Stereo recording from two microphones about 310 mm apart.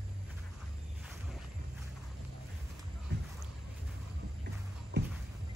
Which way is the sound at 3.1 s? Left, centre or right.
Right.